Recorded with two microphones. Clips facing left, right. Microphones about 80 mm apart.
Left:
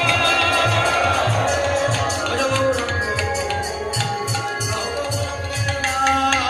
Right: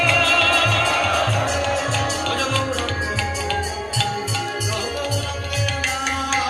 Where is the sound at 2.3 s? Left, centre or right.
Centre.